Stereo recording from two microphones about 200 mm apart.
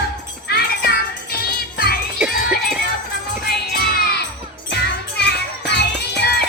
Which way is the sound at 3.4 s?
50° left (ahead or behind).